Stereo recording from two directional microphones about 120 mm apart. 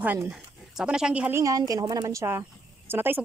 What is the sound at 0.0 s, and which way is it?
Speech, 15° right (ahead or behind).